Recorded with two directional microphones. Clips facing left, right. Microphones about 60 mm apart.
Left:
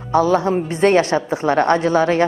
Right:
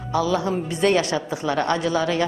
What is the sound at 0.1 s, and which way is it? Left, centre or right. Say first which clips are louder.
A woman's voice: left 6 dB; left.